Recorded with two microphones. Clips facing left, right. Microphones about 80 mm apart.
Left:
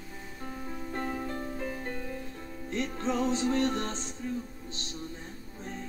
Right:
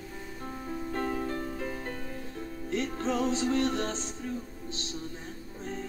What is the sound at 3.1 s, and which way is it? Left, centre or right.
Music, left.